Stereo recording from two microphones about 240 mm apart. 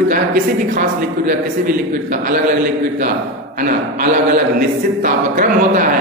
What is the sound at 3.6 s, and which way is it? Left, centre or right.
Speech, right.